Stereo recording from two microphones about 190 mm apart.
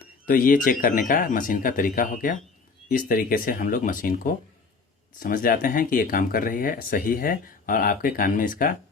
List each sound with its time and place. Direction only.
0.3 s speech: 45° left (ahead or behind)